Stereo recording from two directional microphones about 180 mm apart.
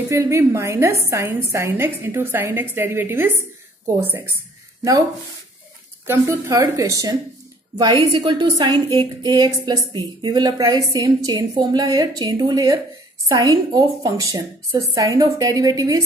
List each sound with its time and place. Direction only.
0.1 s a woman's voice: 15° right (ahead or behind)
6.0 s a woman's voice: 15° right (ahead or behind)